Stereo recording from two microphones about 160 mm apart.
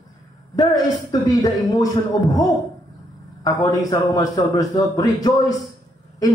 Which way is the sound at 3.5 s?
20° left (ahead or behind).